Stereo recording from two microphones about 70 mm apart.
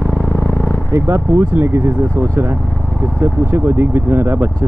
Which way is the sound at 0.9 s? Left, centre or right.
Right.